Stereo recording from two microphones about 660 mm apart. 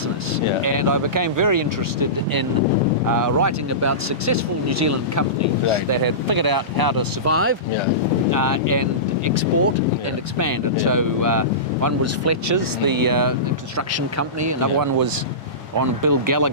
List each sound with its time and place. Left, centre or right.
0.6 s speech: right